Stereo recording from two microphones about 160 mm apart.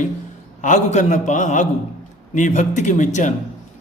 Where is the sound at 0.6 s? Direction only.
50° left (ahead or behind).